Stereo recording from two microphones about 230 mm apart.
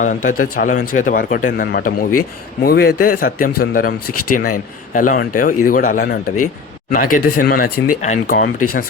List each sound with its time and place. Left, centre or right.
0.0 s a man's voice: left
4.0 s speech: left
4.4 s a man's voice: left